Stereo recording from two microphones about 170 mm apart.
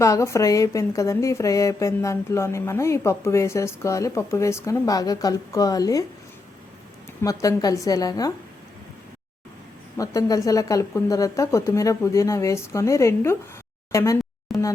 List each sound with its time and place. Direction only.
0.0 s speech: 20° left (ahead or behind)
7.2 s speech: 20° left (ahead or behind)
10.0 s speech: 20° left (ahead or behind)
13.9 s a sound: 20° left (ahead or behind)